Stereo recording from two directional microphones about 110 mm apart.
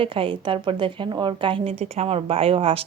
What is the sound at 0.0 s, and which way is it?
A woman's voice, 55° right (ahead or behind).